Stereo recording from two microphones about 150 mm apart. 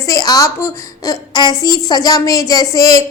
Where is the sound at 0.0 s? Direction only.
25° left (ahead or behind).